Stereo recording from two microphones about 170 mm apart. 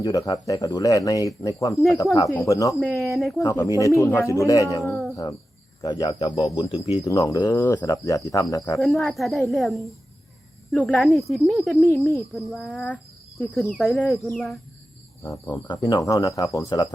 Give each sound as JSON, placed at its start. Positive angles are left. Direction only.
{"t": 0.0, "sound": "speech", "side_deg": 20}
{"t": 1.7, "sound": "speech", "side_deg": 0}
{"t": 2.3, "sound": "speech", "side_deg": 20}
{"t": 2.7, "sound": "speech", "side_deg": 0}
{"t": 3.3, "sound": "speech", "side_deg": 20}
{"t": 4.8, "sound": "cricket", "side_deg": 0}
{"t": 5.8, "sound": "speech", "side_deg": 25}
{"t": 6.7, "sound": "speech", "side_deg": 35}
{"t": 7.0, "sound": "speech", "side_deg": 20}
{"t": 8.8, "sound": "speech", "side_deg": 0}
{"t": 15.2, "sound": "speech", "side_deg": 15}